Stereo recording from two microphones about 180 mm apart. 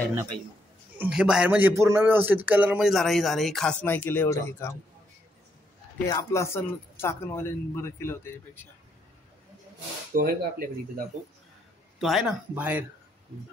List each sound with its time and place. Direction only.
0.9 s a man's voice: 5° right (ahead or behind); by 4.7 s 15° left (ahead or behind)
6.0 s speech: 15° left (ahead or behind)
10.1 s speech: 55° right (ahead or behind)
12.0 s a man's voice: centre (ahead or behind)